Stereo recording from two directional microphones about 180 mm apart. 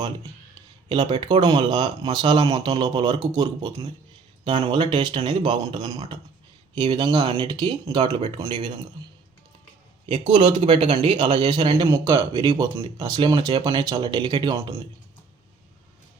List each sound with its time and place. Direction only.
0.9 s speech: 25° right (ahead or behind)
10.1 s speech: 25° right (ahead or behind)
11.9 s speech: 15° right (ahead or behind)